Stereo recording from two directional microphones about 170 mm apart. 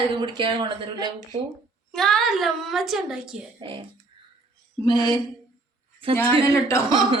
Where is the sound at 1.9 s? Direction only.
Centre (ahead or behind).